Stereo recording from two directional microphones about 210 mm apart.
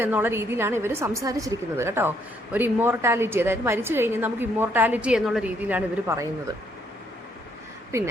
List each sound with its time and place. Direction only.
0.0 s a woman's voice: 10° right (ahead or behind)
7.9 s a woman's voice: 15° right (ahead or behind)